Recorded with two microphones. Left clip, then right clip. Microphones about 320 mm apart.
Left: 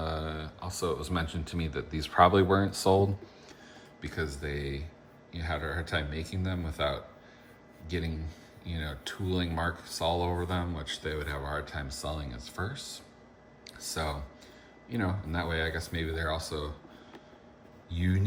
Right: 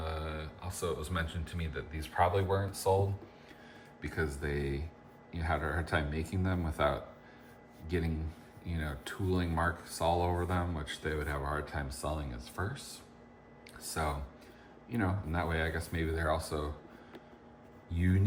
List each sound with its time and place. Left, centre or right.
0.0 s speech: centre
4.0 s speech: centre
17.9 s speech: centre